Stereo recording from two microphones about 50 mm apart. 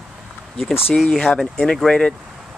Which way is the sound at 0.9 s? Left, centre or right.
Centre.